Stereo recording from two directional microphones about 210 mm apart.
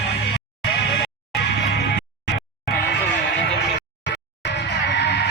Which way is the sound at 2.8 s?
55° left (ahead or behind).